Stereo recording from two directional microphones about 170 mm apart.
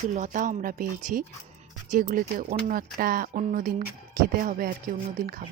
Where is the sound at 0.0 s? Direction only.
50° right (ahead or behind).